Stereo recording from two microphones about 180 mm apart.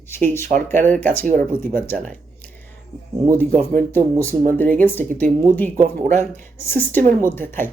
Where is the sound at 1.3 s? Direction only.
50° right (ahead or behind).